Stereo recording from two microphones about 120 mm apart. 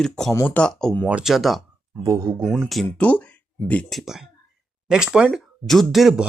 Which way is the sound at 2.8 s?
10° left (ahead or behind).